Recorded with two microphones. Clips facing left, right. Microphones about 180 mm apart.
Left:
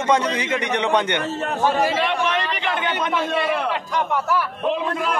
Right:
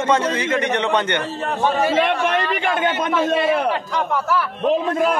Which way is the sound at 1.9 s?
50° right (ahead or behind).